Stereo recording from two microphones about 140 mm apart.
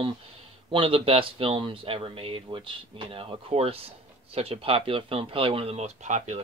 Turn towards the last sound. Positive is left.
turn(degrees=-55)  # may be behind; listen again after turning